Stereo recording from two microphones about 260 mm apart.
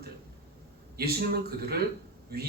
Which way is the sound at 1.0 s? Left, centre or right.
Right.